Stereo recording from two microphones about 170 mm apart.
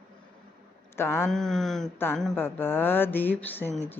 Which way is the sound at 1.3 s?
Centre (ahead or behind).